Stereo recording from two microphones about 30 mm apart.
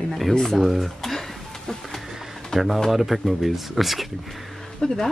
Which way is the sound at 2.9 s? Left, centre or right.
Centre.